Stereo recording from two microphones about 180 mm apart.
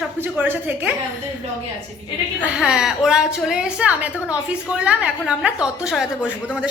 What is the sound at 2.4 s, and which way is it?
A woman's voice, 5° right (ahead or behind).